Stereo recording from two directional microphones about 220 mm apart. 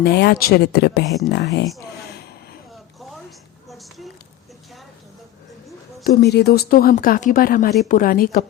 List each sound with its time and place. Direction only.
0.0 s speech: 50° left (ahead or behind)
3.7 s a sound: centre (ahead or behind)
6.1 s speech: 45° left (ahead or behind)